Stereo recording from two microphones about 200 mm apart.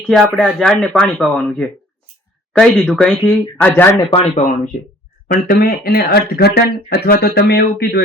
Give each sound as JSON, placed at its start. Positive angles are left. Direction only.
{"t": 0.1, "sound": "speech", "side_deg": 0}
{"t": 4.1, "sound": "speech", "side_deg": 35}
{"t": 5.3, "sound": "speech", "side_deg": 50}